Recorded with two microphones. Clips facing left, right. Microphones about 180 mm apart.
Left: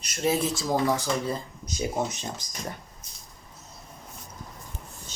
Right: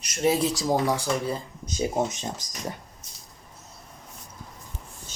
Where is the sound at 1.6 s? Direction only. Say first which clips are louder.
Right 4 dB; 25° right (ahead or behind).